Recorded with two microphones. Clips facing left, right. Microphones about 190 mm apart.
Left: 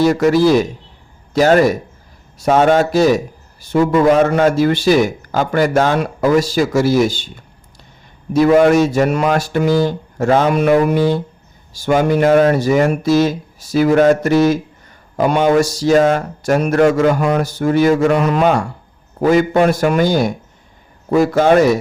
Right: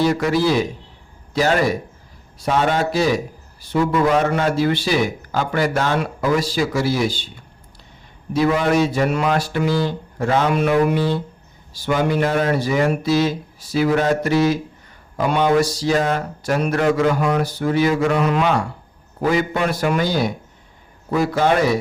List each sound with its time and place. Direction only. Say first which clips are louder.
0.0 s speech: left 6 dB; 45° left (ahead or behind)
8.3 s speech: left 7 dB; 45° left (ahead or behind)